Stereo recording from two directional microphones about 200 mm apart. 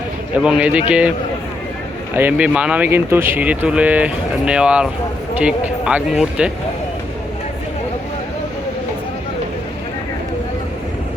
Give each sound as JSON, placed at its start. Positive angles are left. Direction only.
{"t": 0.3, "sound": "speech", "side_deg": -5}
{"t": 2.1, "sound": "speech", "side_deg": -5}